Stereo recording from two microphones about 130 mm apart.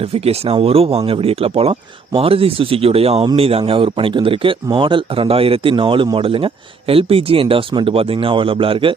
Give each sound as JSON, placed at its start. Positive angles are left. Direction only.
{"t": 0.0, "sound": "speech", "side_deg": -50}